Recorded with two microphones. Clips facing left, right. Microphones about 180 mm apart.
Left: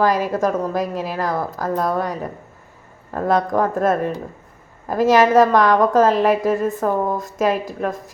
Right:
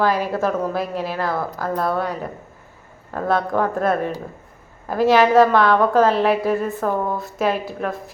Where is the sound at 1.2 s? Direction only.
15° left (ahead or behind).